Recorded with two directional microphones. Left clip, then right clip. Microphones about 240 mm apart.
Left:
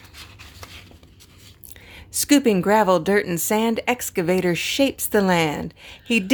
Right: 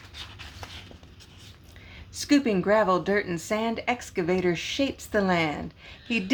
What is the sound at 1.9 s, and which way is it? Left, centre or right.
A woman's voice, left.